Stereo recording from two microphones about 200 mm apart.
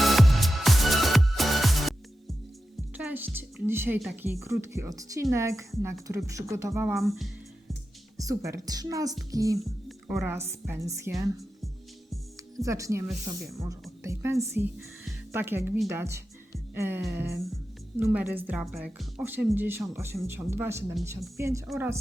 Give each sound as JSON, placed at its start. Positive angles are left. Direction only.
{"t": 0.0, "sound": "music", "side_deg": 0}
{"t": 3.0, "sound": "a woman's voice", "side_deg": -10}
{"t": 8.2, "sound": "a woman's voice", "side_deg": -15}
{"t": 12.5, "sound": "a woman's voice", "side_deg": -15}
{"t": 16.7, "sound": "music", "side_deg": -10}
{"t": 17.9, "sound": "a woman's voice", "side_deg": -5}